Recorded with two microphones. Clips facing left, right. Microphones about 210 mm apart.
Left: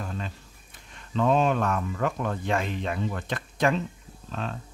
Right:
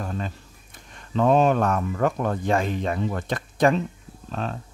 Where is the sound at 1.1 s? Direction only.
50° right (ahead or behind).